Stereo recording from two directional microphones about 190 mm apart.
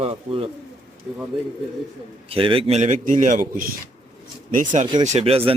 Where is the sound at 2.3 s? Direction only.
30° right (ahead or behind).